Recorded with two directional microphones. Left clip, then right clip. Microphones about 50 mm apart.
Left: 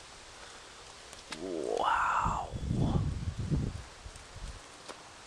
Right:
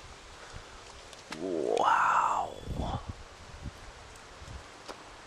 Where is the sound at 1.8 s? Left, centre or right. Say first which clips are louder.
Right 4 dB; right.